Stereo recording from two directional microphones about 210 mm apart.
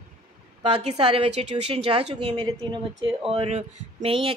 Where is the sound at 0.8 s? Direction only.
30° right (ahead or behind).